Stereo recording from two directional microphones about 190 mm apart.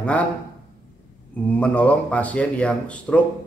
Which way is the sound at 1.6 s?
5° left (ahead or behind).